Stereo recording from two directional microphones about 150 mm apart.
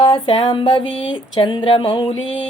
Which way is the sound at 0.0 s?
35° left (ahead or behind).